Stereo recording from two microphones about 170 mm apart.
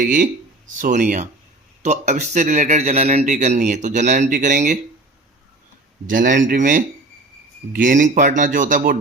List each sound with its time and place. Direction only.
0.0 s speech: 50° right (ahead or behind)
6.1 s speech: 50° right (ahead or behind)